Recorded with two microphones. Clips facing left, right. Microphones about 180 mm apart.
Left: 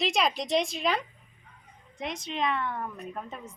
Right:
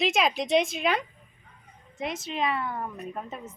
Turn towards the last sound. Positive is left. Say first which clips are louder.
# right 2 dB
turn(degrees=-5)  # may be behind; listen again after turning